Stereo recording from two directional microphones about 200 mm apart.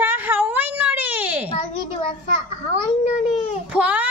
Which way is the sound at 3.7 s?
5° right (ahead or behind).